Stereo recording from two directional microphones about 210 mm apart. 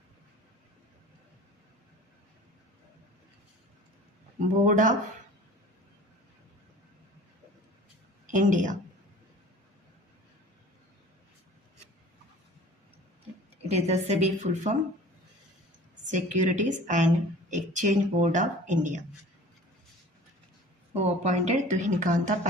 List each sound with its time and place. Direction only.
4.6 s speech: 35° right (ahead or behind)
8.3 s speech: 35° right (ahead or behind)
13.7 s speech: 30° right (ahead or behind)
16.1 s speech: 35° right (ahead or behind)
20.9 s speech: 30° right (ahead or behind)